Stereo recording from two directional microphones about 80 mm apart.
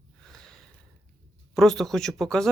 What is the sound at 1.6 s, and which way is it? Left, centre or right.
Speech, centre.